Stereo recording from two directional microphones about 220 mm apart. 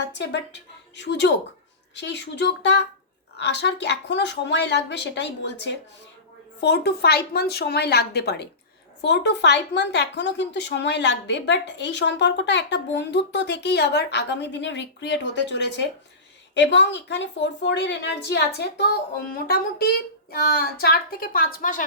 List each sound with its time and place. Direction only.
0.1 s a woman's voice: 55° left (ahead or behind)
20.3 s a woman's voice: 40° left (ahead or behind)